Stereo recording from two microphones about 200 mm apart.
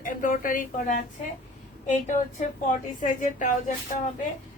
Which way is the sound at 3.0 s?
40° left (ahead or behind).